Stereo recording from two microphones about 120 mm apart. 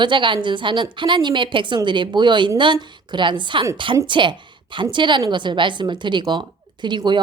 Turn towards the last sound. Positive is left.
turn(degrees=-40)  # may be behind; listen again after turning